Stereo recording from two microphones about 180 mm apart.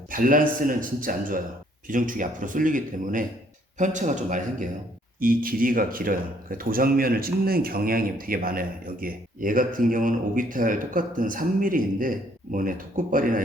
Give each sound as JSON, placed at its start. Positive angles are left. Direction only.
{"t": 0.1, "sound": "speech", "side_deg": -50}